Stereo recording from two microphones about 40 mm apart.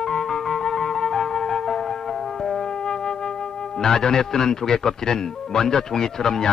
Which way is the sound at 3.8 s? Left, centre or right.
Centre.